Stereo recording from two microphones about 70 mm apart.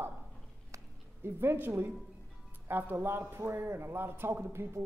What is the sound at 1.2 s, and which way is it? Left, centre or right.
A man's voice, right.